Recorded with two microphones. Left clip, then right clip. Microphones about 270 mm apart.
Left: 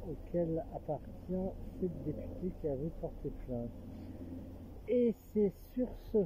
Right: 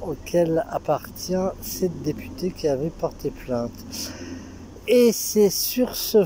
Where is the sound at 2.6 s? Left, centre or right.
Right.